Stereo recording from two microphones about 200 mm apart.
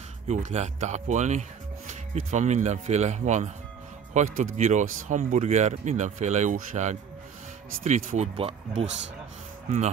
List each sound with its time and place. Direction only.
0.3 s speech: 35° right (ahead or behind)